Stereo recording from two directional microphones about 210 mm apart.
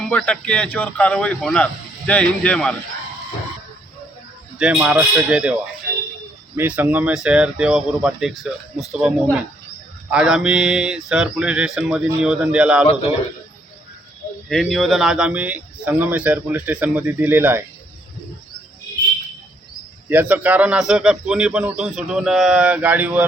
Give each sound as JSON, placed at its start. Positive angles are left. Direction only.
{"t": 0.1, "sound": "a man's voice", "side_deg": 5}
{"t": 4.5, "sound": "a man's voice", "side_deg": -5}
{"t": 6.6, "sound": "a man's voice", "side_deg": -10}
{"t": 12.8, "sound": "a man's voice", "side_deg": 30}
{"t": 14.5, "sound": "speech", "side_deg": 0}
{"t": 20.1, "sound": "a man's voice", "side_deg": -10}